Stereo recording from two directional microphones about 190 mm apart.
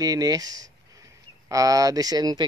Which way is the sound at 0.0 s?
20° right (ahead or behind).